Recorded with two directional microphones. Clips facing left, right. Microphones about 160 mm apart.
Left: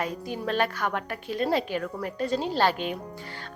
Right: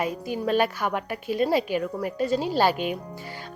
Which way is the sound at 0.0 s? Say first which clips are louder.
Right 3 dB; 10° right (ahead or behind).